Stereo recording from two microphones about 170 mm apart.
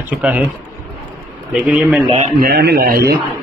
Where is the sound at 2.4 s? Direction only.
75° right (ahead or behind).